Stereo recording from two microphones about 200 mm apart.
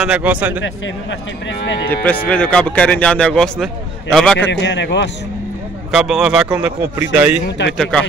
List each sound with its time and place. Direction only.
0.0 s speech: 5° right (ahead or behind)
2.2 s speech: 5° left (ahead or behind)
4.5 s a man's voice: 60° left (ahead or behind)
5.9 s speech: centre (ahead or behind)
7.4 s a man's voice: 60° left (ahead or behind)
7.7 s speech: 5° left (ahead or behind)